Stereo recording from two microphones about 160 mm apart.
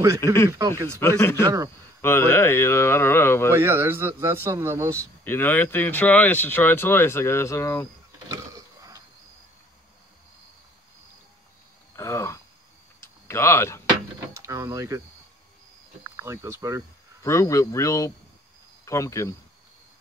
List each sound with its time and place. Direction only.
0.2 s speech: 15° left (ahead or behind)
0.5 s speech: 20° right (ahead or behind)
1.0 s speech: 15° left (ahead or behind)
3.5 s a man's voice: 15° right (ahead or behind)
4.9 s speech: 10° left (ahead or behind)
8.3 s a sound: 25° right (ahead or behind)
11.9 s a sound: 20° left (ahead or behind)
14.3 s speech: 20° right (ahead or behind)
16.3 s a man's voice: 15° right (ahead or behind)
17.2 s speech: 20° left (ahead or behind)